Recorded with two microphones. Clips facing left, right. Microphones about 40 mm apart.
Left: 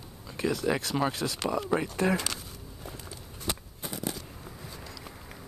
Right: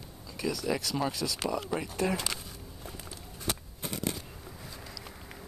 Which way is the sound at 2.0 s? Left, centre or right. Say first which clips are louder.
Left 3 dB; left.